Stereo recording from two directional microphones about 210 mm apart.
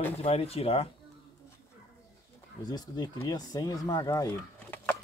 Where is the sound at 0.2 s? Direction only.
30° left (ahead or behind).